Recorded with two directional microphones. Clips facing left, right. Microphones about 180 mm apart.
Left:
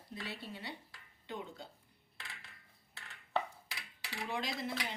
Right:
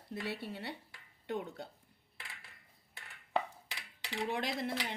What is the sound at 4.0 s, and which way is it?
Dishes, 20° right (ahead or behind).